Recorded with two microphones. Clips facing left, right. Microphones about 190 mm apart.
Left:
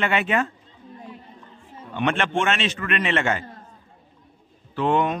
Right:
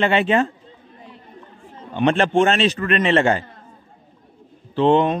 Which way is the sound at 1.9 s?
35° right (ahead or behind).